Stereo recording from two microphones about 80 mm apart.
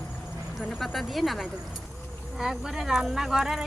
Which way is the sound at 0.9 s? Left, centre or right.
Centre.